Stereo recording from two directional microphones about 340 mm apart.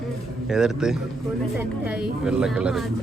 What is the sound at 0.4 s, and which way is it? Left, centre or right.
A man's voice, centre.